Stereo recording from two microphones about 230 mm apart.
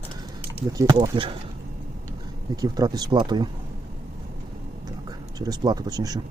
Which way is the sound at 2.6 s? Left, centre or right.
Centre.